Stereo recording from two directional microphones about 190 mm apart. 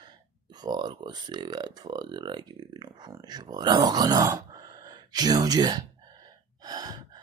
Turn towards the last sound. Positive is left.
turn(degrees=-20)  # may be behind; listen again after turning